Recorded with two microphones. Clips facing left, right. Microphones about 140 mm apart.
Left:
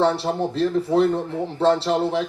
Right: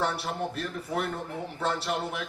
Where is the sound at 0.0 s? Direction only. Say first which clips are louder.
Left 9 dB; 30° left (ahead or behind).